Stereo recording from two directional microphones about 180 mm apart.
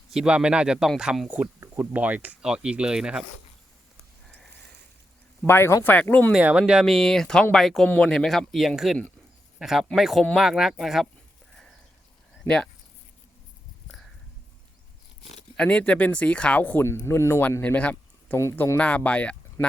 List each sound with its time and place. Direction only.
0.1 s speech: 5° right (ahead or behind)
5.5 s speech: 15° left (ahead or behind)
6.3 s speech: 5° right (ahead or behind)
12.4 s speech: 5° left (ahead or behind)
15.5 s speech: 5° left (ahead or behind)